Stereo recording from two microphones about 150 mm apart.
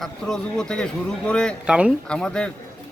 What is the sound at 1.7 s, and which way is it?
Speech, 5° right (ahead or behind).